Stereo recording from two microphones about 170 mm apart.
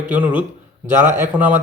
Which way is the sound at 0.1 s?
10° right (ahead or behind).